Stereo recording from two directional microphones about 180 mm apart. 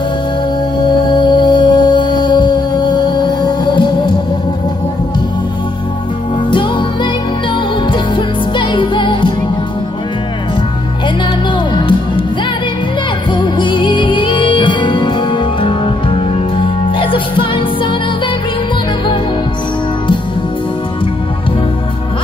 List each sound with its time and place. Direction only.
1.0 s music: 25° left (ahead or behind)
6.5 s music: 25° left (ahead or behind)
11.7 s music: 30° left (ahead or behind)
13.3 s music: 25° left (ahead or behind)